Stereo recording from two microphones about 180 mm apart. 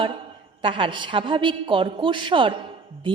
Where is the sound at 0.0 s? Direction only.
30° right (ahead or behind).